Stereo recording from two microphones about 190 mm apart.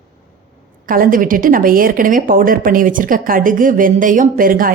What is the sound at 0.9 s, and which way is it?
Speech, 45° right (ahead or behind).